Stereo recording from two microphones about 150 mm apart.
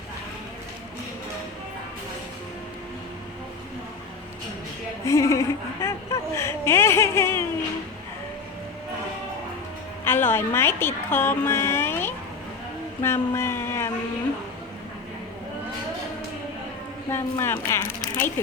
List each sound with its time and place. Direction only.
5.0 s a sound: 20° left (ahead or behind)
10.0 s a woman's voice: 15° left (ahead or behind)
17.1 s a woman's voice: 15° left (ahead or behind)